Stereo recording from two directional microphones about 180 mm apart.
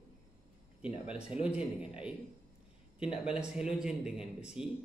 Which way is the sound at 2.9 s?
5° right (ahead or behind).